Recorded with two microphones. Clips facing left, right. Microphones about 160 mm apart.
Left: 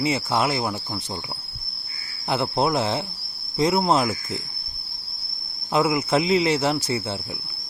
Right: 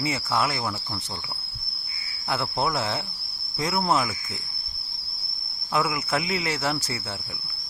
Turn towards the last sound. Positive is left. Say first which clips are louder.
# left 5 dB
turn(degrees=20)  # may be behind; listen again after turning